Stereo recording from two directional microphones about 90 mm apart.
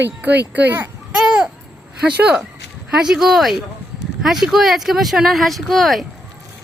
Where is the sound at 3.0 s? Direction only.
5° right (ahead or behind).